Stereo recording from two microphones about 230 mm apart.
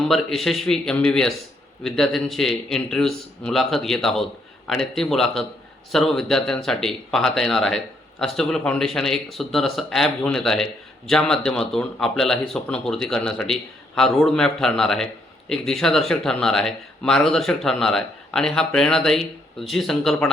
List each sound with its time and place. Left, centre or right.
0.0 s a man's voice: centre